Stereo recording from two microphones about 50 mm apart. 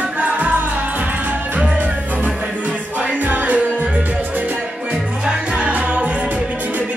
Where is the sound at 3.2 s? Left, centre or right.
Right.